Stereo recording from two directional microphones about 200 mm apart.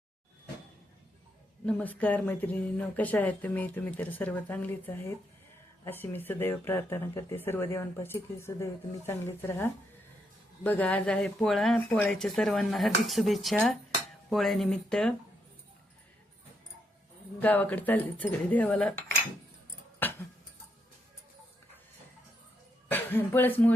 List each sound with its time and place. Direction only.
1.6 s speech: 10° left (ahead or behind)
17.4 s speech: 10° left (ahead or behind)
20.0 s a sound: 10° left (ahead or behind)
22.9 s speech: 10° left (ahead or behind)